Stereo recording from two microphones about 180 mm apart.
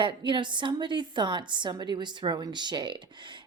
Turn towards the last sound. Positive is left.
turn(degrees=-25)  # may be behind; listen again after turning